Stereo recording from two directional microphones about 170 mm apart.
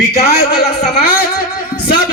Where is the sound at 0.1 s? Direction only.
70° left (ahead or behind).